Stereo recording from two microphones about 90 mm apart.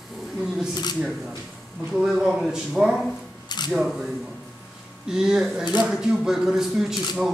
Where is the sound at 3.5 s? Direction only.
50° left (ahead or behind).